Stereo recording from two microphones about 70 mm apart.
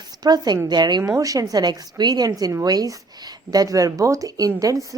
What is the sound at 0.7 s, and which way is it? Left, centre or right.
Speech, right.